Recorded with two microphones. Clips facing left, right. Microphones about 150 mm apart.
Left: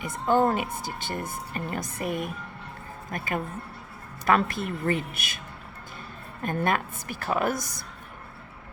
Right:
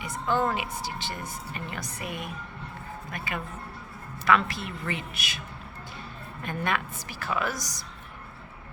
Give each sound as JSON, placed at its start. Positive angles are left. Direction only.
{"t": 0.0, "sound": "a woman's voice", "side_deg": 50}
{"t": 6.4, "sound": "a woman's voice", "side_deg": 45}